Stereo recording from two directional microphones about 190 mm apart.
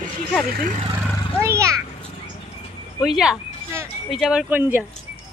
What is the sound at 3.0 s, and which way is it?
Speech, centre (ahead or behind).